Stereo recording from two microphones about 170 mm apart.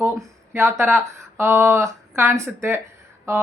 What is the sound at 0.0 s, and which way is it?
Speech, 15° right (ahead or behind).